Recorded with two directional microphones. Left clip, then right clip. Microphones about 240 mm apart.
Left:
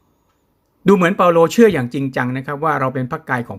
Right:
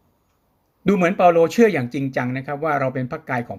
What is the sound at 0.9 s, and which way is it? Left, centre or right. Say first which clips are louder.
Speech: left 3 dB; centre.